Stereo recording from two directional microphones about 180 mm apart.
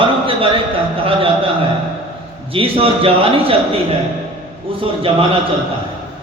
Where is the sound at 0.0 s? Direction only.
30° right (ahead or behind).